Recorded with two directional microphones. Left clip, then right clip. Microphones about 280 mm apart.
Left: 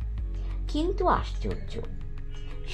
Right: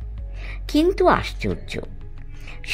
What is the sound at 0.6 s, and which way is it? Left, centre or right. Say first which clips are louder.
Speech: right 9 dB; right.